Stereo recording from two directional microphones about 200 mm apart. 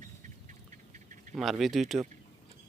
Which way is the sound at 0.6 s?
40° right (ahead or behind).